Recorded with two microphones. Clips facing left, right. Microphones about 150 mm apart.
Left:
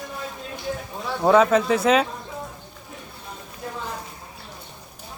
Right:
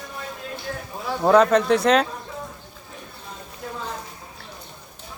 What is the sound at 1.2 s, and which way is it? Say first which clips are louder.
Speech: right 1 dB; 5° left (ahead or behind).